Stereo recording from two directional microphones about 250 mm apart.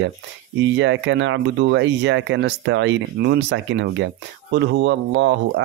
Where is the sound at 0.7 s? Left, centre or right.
Right.